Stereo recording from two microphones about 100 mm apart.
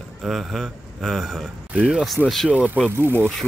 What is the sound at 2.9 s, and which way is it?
Speech, 20° right (ahead or behind).